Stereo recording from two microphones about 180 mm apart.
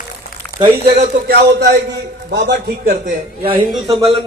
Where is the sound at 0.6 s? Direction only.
35° right (ahead or behind).